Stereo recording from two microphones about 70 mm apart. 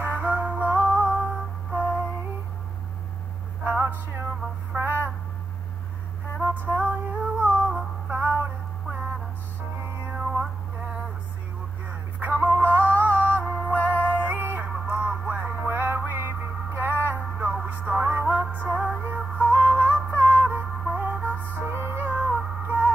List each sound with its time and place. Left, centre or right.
0.0 s music: right
3.6 s music: right
6.7 s music: centre
8.1 s music: right
9.8 s music: right
10.1 s music: centre
12.2 s music: right
21.2 s music: left
21.5 s music: right